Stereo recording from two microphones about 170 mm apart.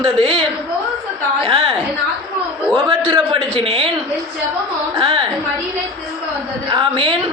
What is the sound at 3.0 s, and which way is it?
Speech, 30° right (ahead or behind).